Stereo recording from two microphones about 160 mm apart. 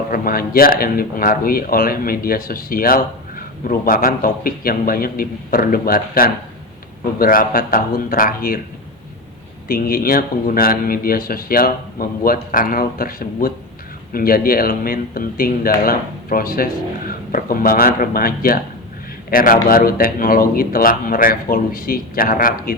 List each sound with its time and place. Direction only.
0.1 s speech: 65° left (ahead or behind)
9.6 s speech: 65° left (ahead or behind)